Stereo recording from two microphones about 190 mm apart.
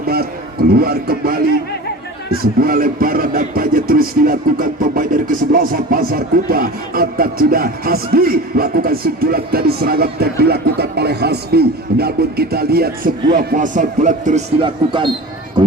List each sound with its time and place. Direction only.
0.0 s a sound: 55° right (ahead or behind)
0.7 s speech: 55° right (ahead or behind)
14.6 s speech: 25° right (ahead or behind)